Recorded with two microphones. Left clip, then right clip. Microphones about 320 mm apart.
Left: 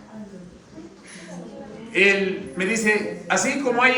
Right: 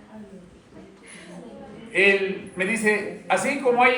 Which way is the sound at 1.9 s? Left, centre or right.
Centre.